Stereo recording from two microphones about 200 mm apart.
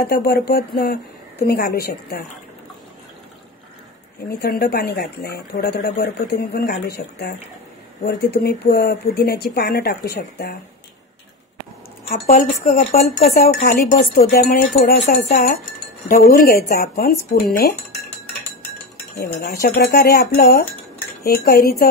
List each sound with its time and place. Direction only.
0.0 s speech: 50° left (ahead or behind)
4.3 s speech: 50° left (ahead or behind)
12.1 s a woman's voice: 45° left (ahead or behind)
13.1 s a woman's voice: 50° left (ahead or behind)
19.1 s speech: 55° left (ahead or behind)